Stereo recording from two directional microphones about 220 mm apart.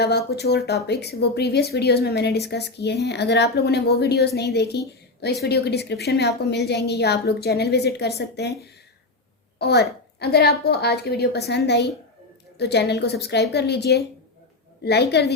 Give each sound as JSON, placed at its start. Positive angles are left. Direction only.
{"t": 0.0, "sound": "speech", "side_deg": 50}
{"t": 9.6, "sound": "speech", "side_deg": 50}